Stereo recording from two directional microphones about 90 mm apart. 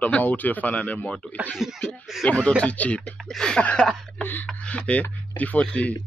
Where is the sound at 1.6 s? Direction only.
5° right (ahead or behind).